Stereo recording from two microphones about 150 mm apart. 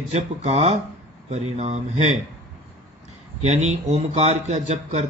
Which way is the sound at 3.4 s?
50° right (ahead or behind).